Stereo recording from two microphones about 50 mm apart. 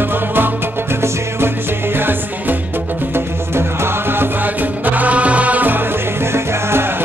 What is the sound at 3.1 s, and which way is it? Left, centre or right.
Music, right.